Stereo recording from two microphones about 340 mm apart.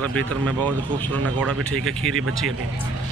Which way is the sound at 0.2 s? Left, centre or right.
Right.